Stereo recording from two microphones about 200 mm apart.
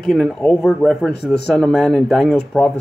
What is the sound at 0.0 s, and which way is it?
A man's voice, centre (ahead or behind).